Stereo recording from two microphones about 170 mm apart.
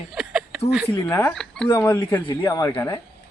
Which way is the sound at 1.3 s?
5° left (ahead or behind).